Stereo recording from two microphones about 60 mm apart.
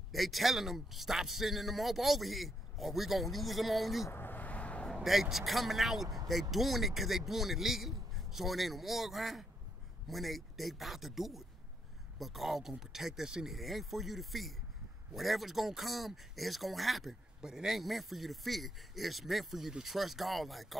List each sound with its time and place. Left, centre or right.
0.1 s speech: centre
4.1 s vehicle: left
4.9 s speech: centre
17.4 s speech: centre